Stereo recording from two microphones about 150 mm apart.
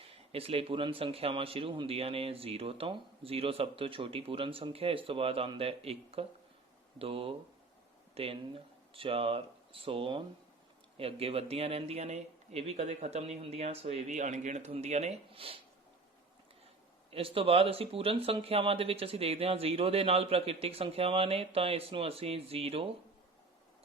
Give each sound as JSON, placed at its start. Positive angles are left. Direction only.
{"t": 0.0, "sound": "a man's voice", "side_deg": -40}
{"t": 17.1, "sound": "a man's voice", "side_deg": -40}